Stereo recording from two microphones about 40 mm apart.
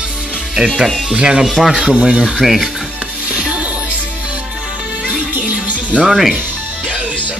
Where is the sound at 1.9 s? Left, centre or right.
Right.